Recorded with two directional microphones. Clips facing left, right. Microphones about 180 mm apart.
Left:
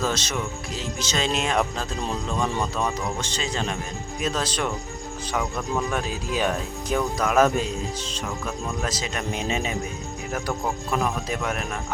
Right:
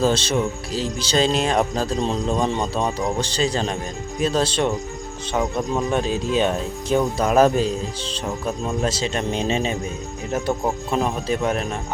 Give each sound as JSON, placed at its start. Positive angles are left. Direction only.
{"t": 0.0, "sound": "speech", "side_deg": -30}
{"t": 10.9, "sound": "speech", "side_deg": -30}